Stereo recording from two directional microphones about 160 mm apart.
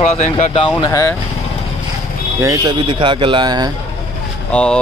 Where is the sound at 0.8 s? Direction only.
20° left (ahead or behind).